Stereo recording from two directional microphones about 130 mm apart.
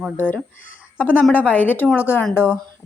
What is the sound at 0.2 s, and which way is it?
A woman's voice, 10° left (ahead or behind).